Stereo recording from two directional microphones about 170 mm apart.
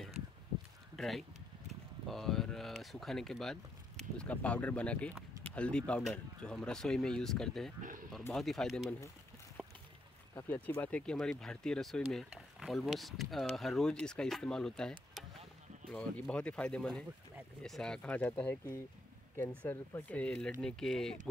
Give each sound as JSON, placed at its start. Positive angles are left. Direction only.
{"t": 0.9, "sound": "speech", "side_deg": 0}
{"t": 9.6, "sound": "a sound", "side_deg": -5}
{"t": 10.5, "sound": "speech", "side_deg": 10}
{"t": 19.6, "sound": "speech", "side_deg": 10}